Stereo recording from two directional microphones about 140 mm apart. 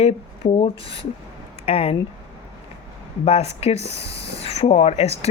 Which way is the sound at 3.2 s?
45° left (ahead or behind).